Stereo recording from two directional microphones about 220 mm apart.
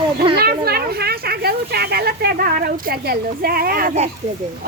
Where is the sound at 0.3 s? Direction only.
45° right (ahead or behind).